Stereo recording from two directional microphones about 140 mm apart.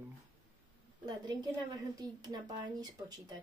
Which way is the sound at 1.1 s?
30° right (ahead or behind).